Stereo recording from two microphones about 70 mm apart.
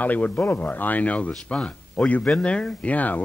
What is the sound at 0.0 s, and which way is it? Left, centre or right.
A man's voice, left.